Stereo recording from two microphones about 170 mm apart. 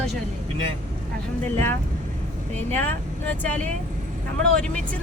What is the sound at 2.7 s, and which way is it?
Speech, 10° left (ahead or behind).